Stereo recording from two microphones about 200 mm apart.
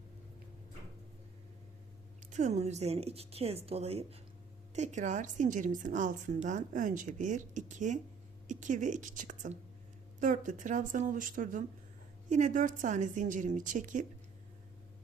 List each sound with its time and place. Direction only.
2.3 s a woman's voice: 35° right (ahead or behind)